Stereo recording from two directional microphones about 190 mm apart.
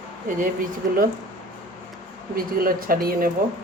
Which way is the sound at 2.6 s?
50° right (ahead or behind).